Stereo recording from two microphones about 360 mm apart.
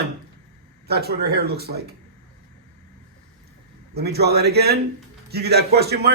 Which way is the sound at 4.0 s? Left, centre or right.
Right.